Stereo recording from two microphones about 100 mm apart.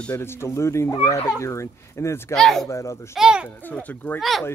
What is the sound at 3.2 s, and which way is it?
Speech, 10° right (ahead or behind).